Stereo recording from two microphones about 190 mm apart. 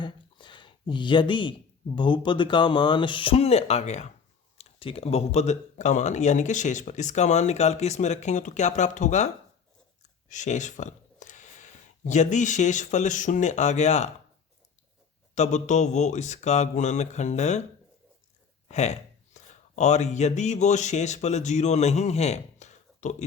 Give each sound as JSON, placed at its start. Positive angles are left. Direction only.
{"t": 0.0, "sound": "speech", "side_deg": 25}
{"t": 15.4, "sound": "speech", "side_deg": 40}
{"t": 18.7, "sound": "speech", "side_deg": 35}